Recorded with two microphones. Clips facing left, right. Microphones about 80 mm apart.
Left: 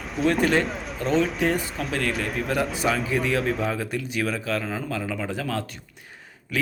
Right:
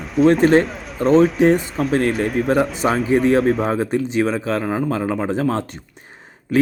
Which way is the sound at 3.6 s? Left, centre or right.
Right.